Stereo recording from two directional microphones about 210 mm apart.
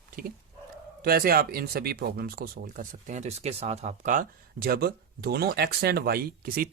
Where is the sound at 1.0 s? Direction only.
45° right (ahead or behind).